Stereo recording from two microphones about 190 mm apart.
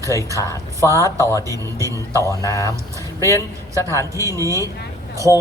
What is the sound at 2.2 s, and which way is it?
A man's voice, 20° left (ahead or behind).